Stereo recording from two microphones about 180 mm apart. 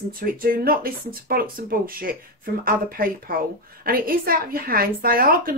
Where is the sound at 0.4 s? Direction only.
55° right (ahead or behind).